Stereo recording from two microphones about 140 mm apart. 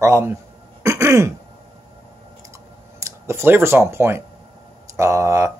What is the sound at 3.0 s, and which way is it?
Speech, 20° right (ahead or behind).